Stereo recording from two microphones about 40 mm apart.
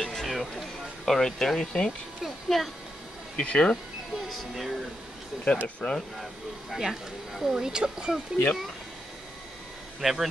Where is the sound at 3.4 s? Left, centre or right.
Left.